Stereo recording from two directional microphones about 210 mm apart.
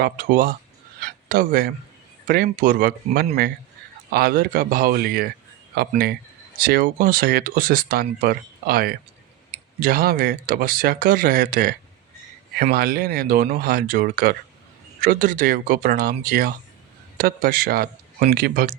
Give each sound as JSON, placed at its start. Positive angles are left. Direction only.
{"t": 0.0, "sound": "speech", "side_deg": -40}
{"t": 0.9, "sound": "a sound", "side_deg": -45}
{"t": 2.2, "sound": "speech", "side_deg": -45}
{"t": 12.7, "sound": "speech", "side_deg": -45}